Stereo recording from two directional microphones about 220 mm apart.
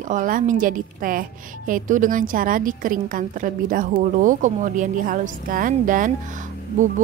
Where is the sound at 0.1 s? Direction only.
35° right (ahead or behind).